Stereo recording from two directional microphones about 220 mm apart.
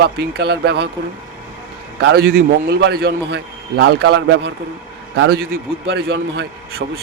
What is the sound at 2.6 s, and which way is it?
A man's voice, 45° right (ahead or behind).